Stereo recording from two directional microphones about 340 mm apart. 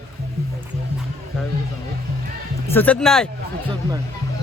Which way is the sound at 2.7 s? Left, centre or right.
Centre.